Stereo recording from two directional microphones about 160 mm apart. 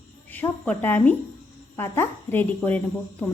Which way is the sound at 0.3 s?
10° left (ahead or behind).